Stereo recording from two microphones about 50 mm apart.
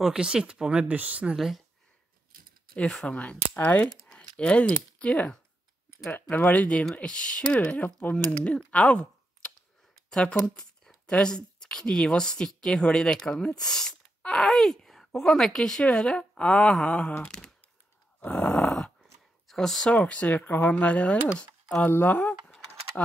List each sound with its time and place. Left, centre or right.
0.0 s speech: centre
1.3 s speech: centre
2.7 s speech: centre
3.1 s speech: left
4.1 s speech: centre
6.3 s speech: left
18.2 s speech: left
18.6 s speech: centre
19.9 s speech: left